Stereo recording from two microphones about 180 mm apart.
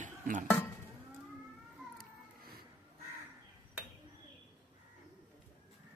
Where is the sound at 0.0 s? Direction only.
45° right (ahead or behind).